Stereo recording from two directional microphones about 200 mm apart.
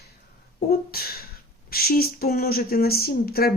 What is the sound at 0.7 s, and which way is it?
Speech, 50° left (ahead or behind).